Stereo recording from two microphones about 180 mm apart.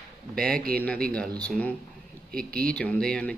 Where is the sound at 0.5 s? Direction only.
55° right (ahead or behind).